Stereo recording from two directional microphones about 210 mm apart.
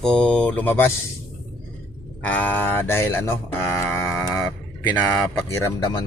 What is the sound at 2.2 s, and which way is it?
Speech, 5° left (ahead or behind).